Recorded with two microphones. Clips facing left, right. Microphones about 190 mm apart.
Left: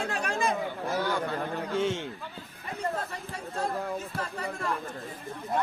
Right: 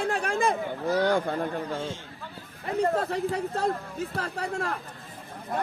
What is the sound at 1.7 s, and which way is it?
Speech, 70° left (ahead or behind).